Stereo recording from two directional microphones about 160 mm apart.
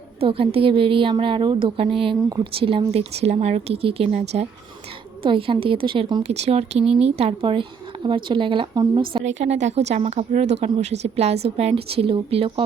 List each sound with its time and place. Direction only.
0.2 s speech: 35° right (ahead or behind)
6.3 s speech: 40° right (ahead or behind)
9.2 s speech: 45° right (ahead or behind)